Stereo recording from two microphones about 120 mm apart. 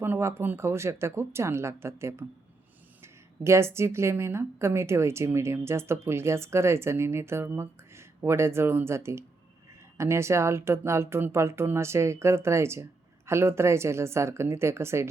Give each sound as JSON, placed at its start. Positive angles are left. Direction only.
{"t": 0.0, "sound": "a woman's voice", "side_deg": -20}